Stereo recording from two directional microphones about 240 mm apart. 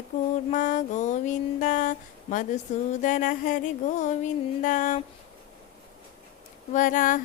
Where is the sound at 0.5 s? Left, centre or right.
Left.